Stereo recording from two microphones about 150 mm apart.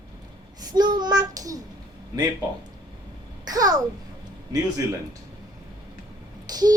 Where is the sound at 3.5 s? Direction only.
25° right (ahead or behind).